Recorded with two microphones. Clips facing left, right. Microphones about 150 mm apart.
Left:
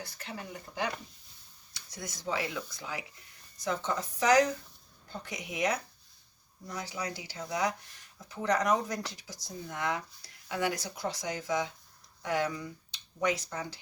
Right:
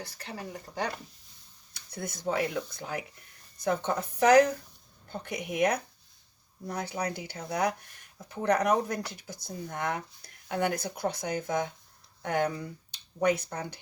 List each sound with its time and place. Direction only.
0.0 s speech: 35° right (ahead or behind)
1.7 s speech: 55° right (ahead or behind)